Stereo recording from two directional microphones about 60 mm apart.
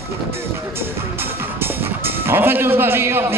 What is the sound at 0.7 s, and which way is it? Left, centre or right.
Music, right.